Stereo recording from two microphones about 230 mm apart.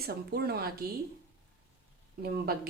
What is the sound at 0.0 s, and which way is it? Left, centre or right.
Speech, right.